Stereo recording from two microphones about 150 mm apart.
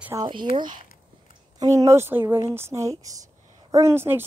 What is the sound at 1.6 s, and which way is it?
Speech, 25° right (ahead or behind).